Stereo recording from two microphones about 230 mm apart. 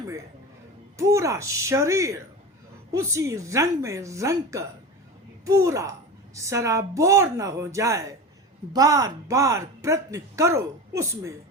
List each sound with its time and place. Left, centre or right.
0.9 s speech: centre